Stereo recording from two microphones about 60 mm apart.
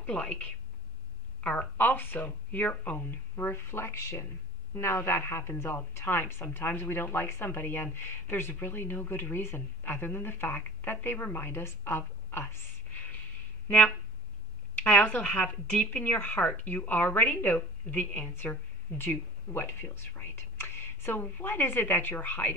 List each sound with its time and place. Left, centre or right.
0.0 s a woman's voice: centre; by 12.6 s left
13.7 s a woman's voice: left